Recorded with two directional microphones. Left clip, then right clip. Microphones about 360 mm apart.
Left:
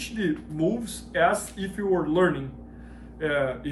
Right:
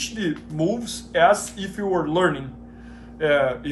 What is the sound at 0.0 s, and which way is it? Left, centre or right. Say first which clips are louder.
Speech: right 2 dB; centre.